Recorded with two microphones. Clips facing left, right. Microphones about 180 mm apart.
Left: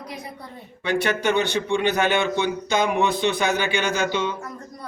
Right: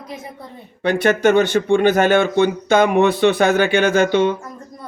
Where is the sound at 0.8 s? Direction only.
50° right (ahead or behind).